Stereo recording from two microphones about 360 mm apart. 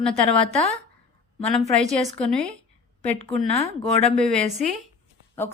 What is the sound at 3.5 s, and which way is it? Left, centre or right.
Speech, centre.